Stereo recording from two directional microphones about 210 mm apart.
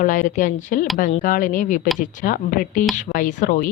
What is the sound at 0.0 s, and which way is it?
A woman's voice, 40° left (ahead or behind).